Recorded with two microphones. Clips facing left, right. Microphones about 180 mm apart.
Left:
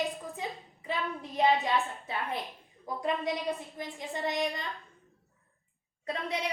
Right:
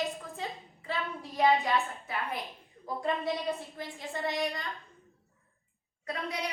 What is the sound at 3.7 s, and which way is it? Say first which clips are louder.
Speech: left 1 dB; 20° left (ahead or behind).